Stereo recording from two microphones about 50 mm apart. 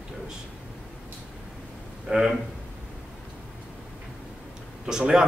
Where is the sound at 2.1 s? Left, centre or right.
Right.